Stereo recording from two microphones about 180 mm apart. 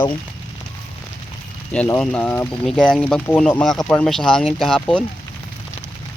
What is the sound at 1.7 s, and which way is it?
Speech, 5° left (ahead or behind).